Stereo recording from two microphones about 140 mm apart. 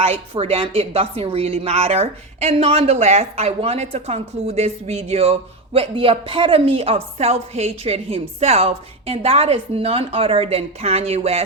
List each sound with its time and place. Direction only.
0.0 s speech: 45° right (ahead or behind)